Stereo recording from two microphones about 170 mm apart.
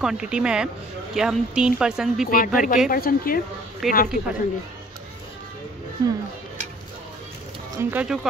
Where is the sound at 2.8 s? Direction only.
60° left (ahead or behind).